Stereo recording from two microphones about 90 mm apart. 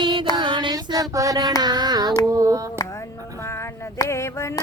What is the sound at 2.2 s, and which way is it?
Hands, 40° right (ahead or behind).